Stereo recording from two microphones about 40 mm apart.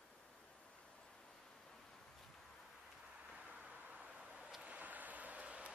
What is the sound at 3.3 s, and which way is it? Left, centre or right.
Vehicle, right.